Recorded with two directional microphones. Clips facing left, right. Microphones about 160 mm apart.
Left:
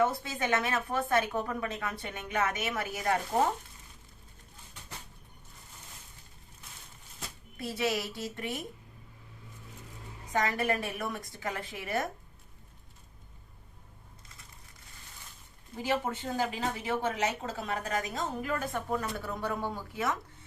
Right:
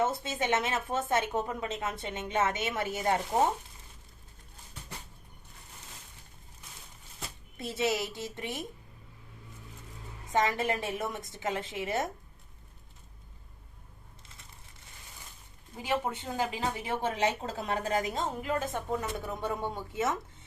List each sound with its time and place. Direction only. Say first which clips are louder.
0.0 s a woman's voice: left 1 dB; 20° right (ahead or behind)
7.5 s a woman's voice: right 1 dB; 20° right (ahead or behind)
10.3 s a woman's voice: right 1 dB; 25° right (ahead or behind)
15.8 s a woman's voice: left 1 dB; 15° right (ahead or behind)